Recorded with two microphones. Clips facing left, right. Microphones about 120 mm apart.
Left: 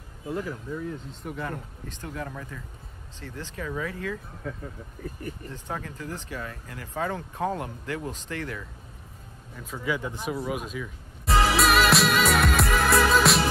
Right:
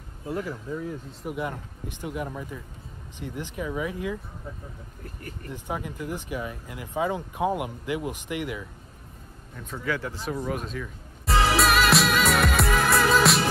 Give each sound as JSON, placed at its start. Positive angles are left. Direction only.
{"t": 0.3, "sound": "speech", "side_deg": -5}
{"t": 5.5, "sound": "speech", "side_deg": -15}
{"t": 9.6, "sound": "speech", "side_deg": 0}
{"t": 9.8, "sound": "speech", "side_deg": 15}
{"t": 10.3, "sound": "music", "side_deg": 5}